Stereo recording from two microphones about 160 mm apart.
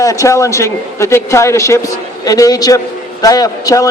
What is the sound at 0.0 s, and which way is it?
A man's voice, 20° left (ahead or behind).